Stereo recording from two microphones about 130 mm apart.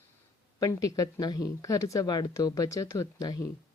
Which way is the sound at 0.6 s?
25° left (ahead or behind).